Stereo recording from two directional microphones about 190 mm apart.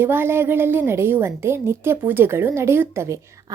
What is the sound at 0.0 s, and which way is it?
A woman's voice, 10° right (ahead or behind).